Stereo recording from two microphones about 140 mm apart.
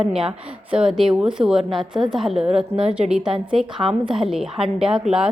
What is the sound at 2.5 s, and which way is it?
Speech, 40° right (ahead or behind).